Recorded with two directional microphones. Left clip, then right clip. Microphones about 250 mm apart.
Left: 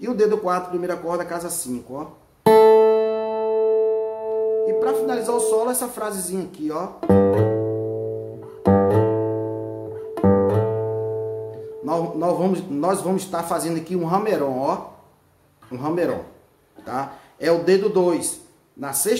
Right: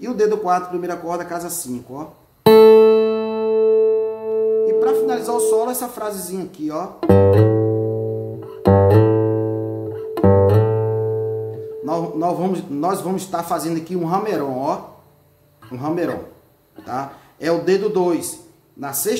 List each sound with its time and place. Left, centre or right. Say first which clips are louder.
0.0 s a man's voice: right 1 dB; centre
2.4 s music: right 4 dB; right
4.6 s a man's voice: right 4 dB; centre
7.0 s music: right 4 dB; right
11.8 s a man's voice: right 1 dB; centre